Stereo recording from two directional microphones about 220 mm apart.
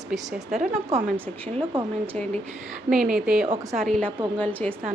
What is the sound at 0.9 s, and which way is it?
Speech, 15° right (ahead or behind).